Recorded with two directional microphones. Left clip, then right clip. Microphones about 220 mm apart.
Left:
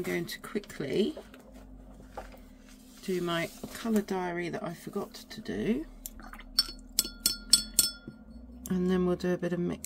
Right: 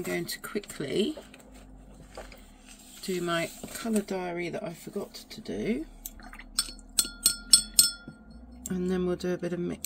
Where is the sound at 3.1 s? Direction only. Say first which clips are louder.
Right 2 dB; 5° left (ahead or behind); by 5.8 s 20° left (ahead or behind).